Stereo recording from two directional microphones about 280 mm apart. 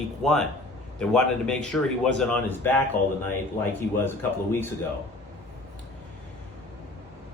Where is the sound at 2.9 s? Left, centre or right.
Left.